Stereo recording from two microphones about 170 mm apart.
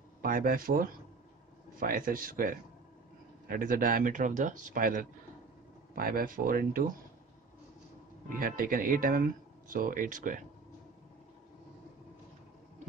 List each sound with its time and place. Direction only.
0.2 s speech: 60° right (ahead or behind)
8.4 s speech: 55° right (ahead or behind)